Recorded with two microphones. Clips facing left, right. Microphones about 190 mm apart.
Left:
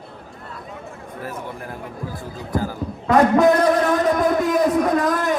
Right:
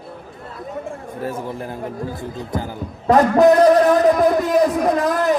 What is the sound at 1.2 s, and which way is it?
Speech, 30° right (ahead or behind).